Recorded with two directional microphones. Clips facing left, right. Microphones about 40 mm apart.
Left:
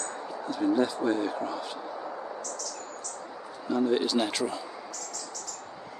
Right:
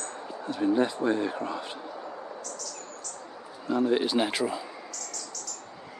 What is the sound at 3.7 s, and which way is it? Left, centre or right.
Speech, centre.